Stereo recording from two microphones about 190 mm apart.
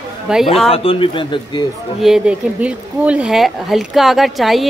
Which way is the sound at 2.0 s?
5° right (ahead or behind).